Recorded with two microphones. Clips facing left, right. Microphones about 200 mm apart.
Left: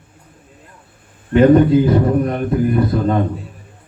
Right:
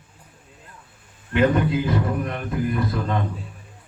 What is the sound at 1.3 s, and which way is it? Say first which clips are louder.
A man's voice: left 10 dB; 35° left (ahead or behind).